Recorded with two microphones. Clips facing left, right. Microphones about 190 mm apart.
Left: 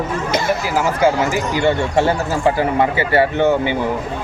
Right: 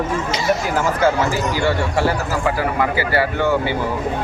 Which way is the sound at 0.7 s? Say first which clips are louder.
Left 4 dB; 15° left (ahead or behind).